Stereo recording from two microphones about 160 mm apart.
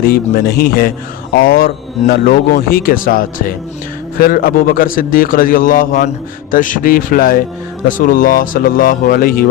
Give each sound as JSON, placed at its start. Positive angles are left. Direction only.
{"t": 0.0, "sound": "a man's voice", "side_deg": 70}